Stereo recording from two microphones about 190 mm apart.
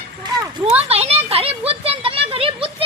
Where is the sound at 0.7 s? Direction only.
35° right (ahead or behind).